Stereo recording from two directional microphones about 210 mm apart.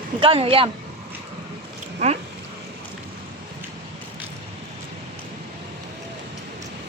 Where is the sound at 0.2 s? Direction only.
25° right (ahead or behind).